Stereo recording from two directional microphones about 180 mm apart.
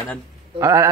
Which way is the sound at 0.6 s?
15° right (ahead or behind).